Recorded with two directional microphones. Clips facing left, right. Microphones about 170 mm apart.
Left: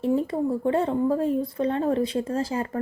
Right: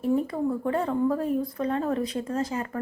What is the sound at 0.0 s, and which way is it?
Speech, 25° left (ahead or behind).